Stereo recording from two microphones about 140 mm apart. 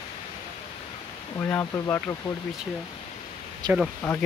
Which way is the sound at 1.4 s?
20° left (ahead or behind).